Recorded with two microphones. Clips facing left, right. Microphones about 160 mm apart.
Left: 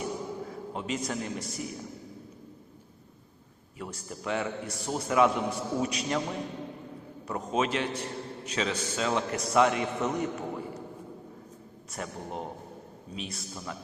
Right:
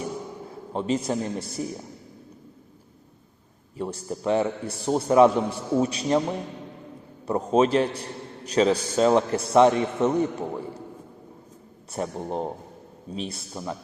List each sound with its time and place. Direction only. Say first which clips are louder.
0.7 s a man's voice: right 9 dB; 30° right (ahead or behind)
3.8 s a man's voice: right 9 dB; 30° right (ahead or behind)
7.3 s a man's voice: right 8 dB; 30° right (ahead or behind)
11.9 s a man's voice: right 8 dB; 30° right (ahead or behind)